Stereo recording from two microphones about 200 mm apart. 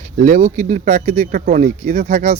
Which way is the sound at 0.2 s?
40° right (ahead or behind).